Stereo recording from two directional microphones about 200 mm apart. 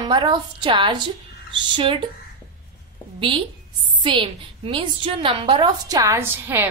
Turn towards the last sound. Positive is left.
turn(degrees=-10)  # may be behind; listen again after turning